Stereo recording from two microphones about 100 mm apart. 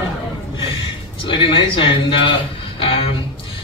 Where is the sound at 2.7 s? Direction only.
65° left (ahead or behind).